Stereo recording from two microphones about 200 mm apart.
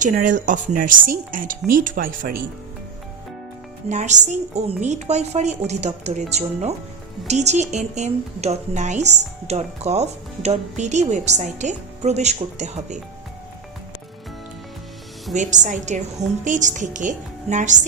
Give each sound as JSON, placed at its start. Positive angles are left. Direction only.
{"t": 0.0, "sound": "a woman's voice", "side_deg": -40}
{"t": 3.8, "sound": "a woman's voice", "side_deg": -35}
{"t": 15.4, "sound": "a woman's voice", "side_deg": -35}